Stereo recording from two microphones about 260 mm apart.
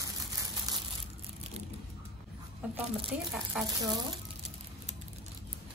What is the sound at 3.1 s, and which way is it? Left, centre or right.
Speech, centre.